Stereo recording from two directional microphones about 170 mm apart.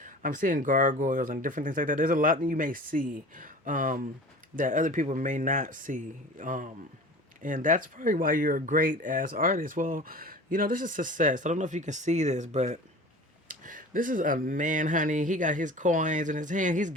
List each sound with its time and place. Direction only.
0.0 s speech: 50° right (ahead or behind)